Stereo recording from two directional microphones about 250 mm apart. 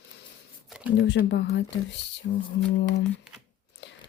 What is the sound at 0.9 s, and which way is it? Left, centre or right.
Speech, left.